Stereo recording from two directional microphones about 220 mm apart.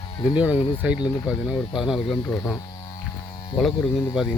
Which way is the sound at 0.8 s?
5° right (ahead or behind).